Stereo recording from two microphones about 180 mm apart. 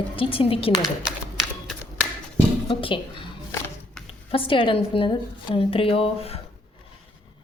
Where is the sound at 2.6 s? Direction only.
30° left (ahead or behind).